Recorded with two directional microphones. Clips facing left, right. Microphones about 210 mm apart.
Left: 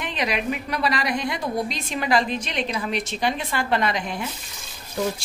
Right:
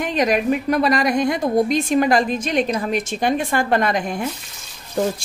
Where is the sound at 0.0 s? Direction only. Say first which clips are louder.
Right 7 dB; 45° right (ahead or behind).